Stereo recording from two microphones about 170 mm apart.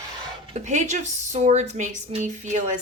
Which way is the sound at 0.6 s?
45° right (ahead or behind).